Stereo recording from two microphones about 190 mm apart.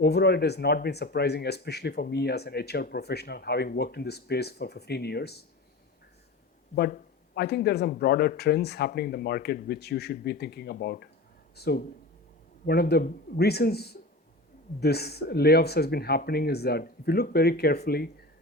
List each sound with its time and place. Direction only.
0.0 s speech: 60° left (ahead or behind)
6.7 s speech: 55° left (ahead or behind)